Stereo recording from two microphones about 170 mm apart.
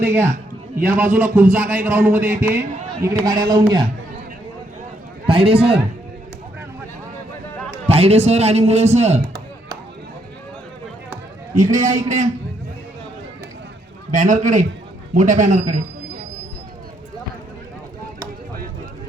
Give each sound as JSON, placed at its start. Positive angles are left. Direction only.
{"t": 0.0, "sound": "a man's voice", "side_deg": -15}
{"t": 5.2, "sound": "a man's voice", "side_deg": -30}
{"t": 7.9, "sound": "a man's voice", "side_deg": -40}
{"t": 11.1, "sound": "a man's voice", "side_deg": -50}
{"t": 14.1, "sound": "a man's voice", "side_deg": -50}